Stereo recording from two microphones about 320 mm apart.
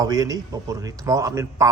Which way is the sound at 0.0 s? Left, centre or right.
Centre.